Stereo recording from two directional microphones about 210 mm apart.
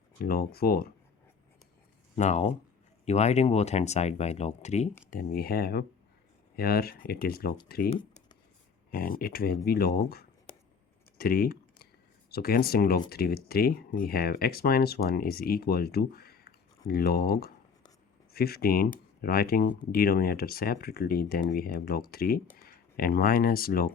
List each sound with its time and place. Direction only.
0.2 s speech: 45° left (ahead or behind)
2.1 s speech: 35° left (ahead or behind)
5.1 s speech: 45° left (ahead or behind)
7.9 s speech: 25° left (ahead or behind)
8.9 s speech: 45° left (ahead or behind)
11.2 s typing: 45° left (ahead or behind)
12.3 s speech: 45° left (ahead or behind)